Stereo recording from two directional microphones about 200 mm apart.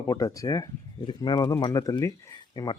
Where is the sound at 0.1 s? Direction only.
15° left (ahead or behind).